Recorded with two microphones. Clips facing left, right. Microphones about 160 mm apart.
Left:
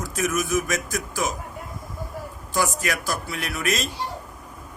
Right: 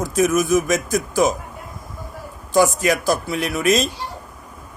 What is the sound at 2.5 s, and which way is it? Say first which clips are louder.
A man's voice: right 9 dB; 20° right (ahead or behind).